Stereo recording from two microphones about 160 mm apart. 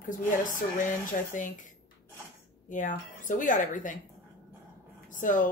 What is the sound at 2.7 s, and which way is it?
Speech, 55° left (ahead or behind).